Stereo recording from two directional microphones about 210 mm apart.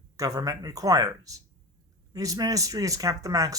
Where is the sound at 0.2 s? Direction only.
15° right (ahead or behind).